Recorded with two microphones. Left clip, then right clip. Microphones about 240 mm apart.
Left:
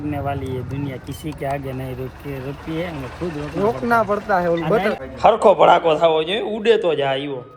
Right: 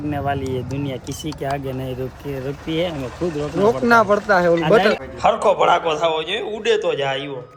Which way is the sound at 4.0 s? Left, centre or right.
Right.